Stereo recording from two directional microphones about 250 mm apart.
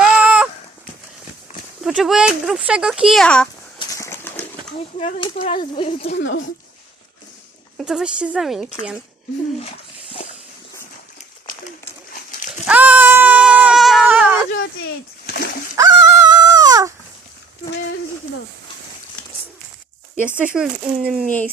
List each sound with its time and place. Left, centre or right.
0.0 s a sound: centre
1.8 s speech: centre
3.8 s horse: centre
4.9 s speech: left
6.1 s speech: left
7.8 s speech: centre
12.6 s a sound: centre
15.3 s splash: left
15.7 s dog: centre
20.1 s speech: centre